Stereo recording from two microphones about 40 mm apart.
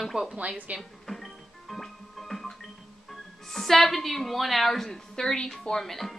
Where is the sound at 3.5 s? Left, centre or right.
Centre.